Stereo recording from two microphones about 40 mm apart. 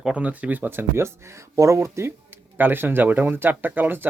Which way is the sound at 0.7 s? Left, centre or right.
Right.